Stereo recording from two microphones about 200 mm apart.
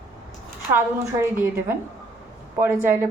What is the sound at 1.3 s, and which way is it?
A woman's voice, 10° right (ahead or behind).